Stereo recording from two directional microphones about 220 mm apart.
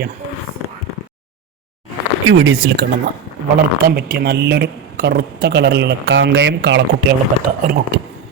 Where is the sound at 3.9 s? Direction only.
45° right (ahead or behind).